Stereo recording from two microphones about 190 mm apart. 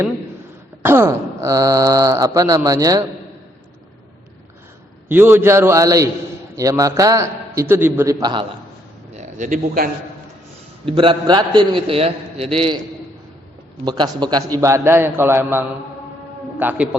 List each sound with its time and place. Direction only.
0.8 s speech: 10° right (ahead or behind)
5.0 s speech: 10° right (ahead or behind)
9.1 s a man's voice: 40° right (ahead or behind)
10.8 s a man's voice: 30° right (ahead or behind)
13.8 s speech: 20° right (ahead or behind)